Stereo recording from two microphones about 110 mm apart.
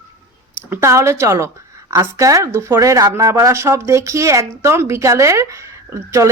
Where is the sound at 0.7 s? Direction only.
25° right (ahead or behind).